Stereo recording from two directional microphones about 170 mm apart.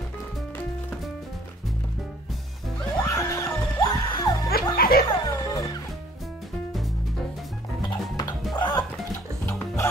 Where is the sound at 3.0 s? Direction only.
15° left (ahead or behind).